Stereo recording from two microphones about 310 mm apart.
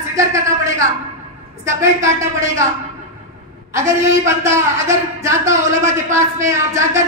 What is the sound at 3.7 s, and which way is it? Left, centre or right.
A man's voice, centre.